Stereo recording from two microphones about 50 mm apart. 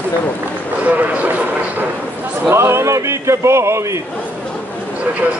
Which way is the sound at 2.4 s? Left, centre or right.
Right.